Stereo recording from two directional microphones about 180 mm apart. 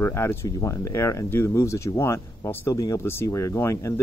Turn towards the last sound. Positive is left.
turn(degrees=15)  # may be behind; listen again after turning